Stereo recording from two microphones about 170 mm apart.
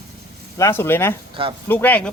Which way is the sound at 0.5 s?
15° left (ahead or behind).